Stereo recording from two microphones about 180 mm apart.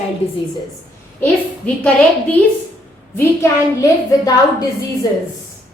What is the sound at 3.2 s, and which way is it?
A woman's voice, 15° left (ahead or behind).